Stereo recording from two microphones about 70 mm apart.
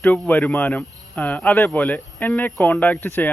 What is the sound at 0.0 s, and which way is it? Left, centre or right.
Speech, left.